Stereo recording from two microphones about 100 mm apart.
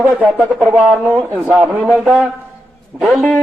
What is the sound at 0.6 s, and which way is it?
A man's voice, 15° right (ahead or behind).